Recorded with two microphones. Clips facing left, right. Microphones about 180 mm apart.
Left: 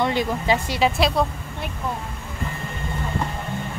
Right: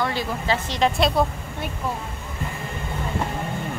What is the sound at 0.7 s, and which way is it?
Speech, 5° left (ahead or behind).